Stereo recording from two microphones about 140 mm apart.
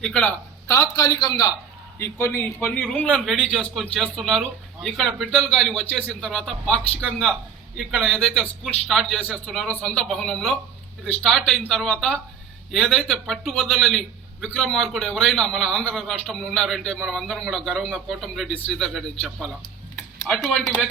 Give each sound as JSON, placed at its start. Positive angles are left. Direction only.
{"t": 0.0, "sound": "speech", "side_deg": 5}
{"t": 0.7, "sound": "a man's voice", "side_deg": 25}
{"t": 20.2, "sound": "speech", "side_deg": 5}